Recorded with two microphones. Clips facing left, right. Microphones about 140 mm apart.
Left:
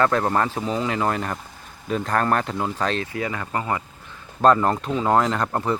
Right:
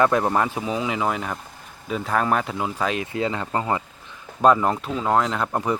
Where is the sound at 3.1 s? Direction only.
25° right (ahead or behind).